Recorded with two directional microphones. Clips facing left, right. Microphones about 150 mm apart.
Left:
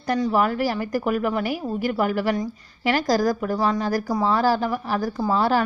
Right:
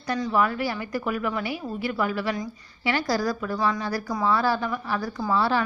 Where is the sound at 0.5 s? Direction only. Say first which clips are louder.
Left 5 dB; 45° left (ahead or behind).